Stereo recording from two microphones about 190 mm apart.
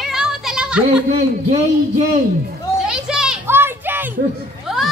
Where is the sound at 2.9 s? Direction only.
5° right (ahead or behind).